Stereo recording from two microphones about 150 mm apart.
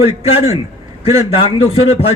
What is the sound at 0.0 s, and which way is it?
A man's voice, 40° left (ahead or behind).